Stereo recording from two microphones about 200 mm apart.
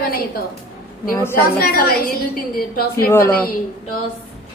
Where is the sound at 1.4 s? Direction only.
50° left (ahead or behind).